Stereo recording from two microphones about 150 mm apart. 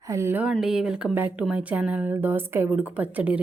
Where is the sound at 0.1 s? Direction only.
15° right (ahead or behind).